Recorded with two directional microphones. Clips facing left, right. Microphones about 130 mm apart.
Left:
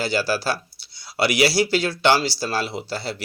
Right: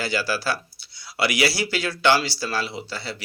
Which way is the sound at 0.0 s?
30° left (ahead or behind).